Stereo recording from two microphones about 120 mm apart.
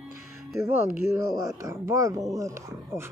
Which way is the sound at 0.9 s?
20° right (ahead or behind).